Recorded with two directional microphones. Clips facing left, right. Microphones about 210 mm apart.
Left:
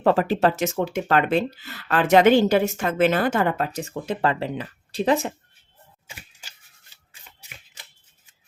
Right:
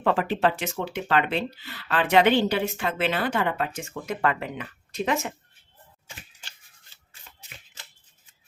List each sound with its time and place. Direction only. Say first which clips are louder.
0.0 s speech: left 4 dB; 40° left (ahead or behind)